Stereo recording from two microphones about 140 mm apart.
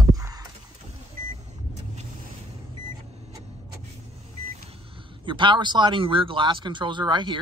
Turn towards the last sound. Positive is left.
turn(degrees=-30)  # may be behind; listen again after turning